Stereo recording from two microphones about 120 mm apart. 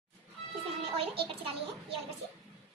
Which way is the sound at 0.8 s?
50° right (ahead or behind).